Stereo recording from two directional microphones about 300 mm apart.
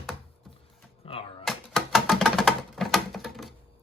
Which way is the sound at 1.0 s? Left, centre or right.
Centre.